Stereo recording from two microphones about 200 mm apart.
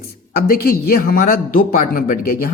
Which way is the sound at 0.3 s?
45° left (ahead or behind).